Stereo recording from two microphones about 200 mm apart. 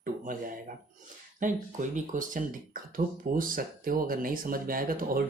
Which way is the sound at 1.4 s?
40° right (ahead or behind).